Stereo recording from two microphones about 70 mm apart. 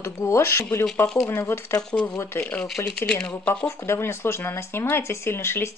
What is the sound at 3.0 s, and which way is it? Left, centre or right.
Speech, centre.